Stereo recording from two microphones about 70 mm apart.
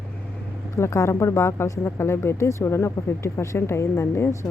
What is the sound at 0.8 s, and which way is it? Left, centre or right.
Speech, left.